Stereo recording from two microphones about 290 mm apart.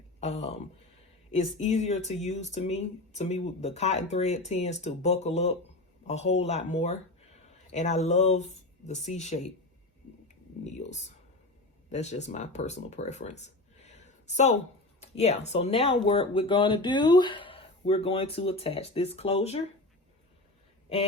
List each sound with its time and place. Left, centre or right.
0.2 s speech: left
10.6 s speech: left